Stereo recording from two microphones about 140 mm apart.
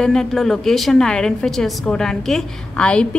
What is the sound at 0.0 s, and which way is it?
A woman's voice, 5° left (ahead or behind).